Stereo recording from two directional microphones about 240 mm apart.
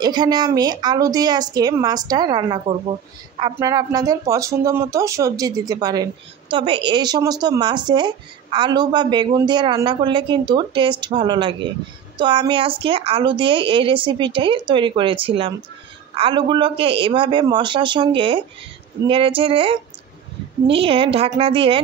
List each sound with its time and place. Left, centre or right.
0.0 s a woman's voice: centre